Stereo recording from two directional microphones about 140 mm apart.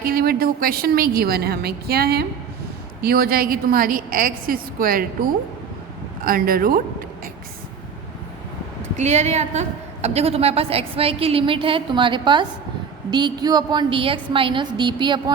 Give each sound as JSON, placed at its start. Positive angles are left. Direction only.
{"t": 0.0, "sound": "a woman's voice", "side_deg": -90}
{"t": 6.2, "sound": "a woman's voice", "side_deg": -90}
{"t": 8.8, "sound": "a woman's voice", "side_deg": -55}